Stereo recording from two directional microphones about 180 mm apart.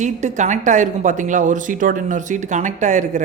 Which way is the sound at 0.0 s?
40° right (ahead or behind).